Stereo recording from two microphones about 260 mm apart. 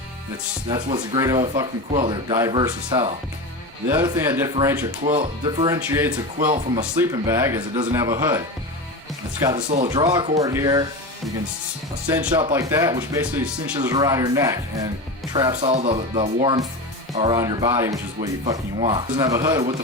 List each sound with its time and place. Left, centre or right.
0.7 s speech: centre
9.6 s speech: right
9.9 s speech: centre
12.5 s speech: centre